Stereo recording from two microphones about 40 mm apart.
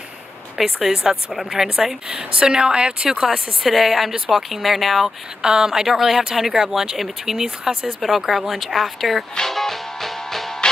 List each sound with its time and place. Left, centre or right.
0.6 s speech: centre; by 3.3 s right
3.3 s speech: centre
5.4 s speech: centre
8.0 s speech: centre
9.5 s music: centre